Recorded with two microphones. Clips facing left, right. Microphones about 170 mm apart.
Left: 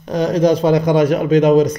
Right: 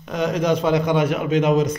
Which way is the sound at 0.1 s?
35° left (ahead or behind).